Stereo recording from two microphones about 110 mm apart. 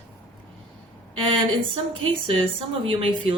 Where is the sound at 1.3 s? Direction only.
55° right (ahead or behind).